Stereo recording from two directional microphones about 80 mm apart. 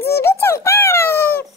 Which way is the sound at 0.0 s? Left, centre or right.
Left.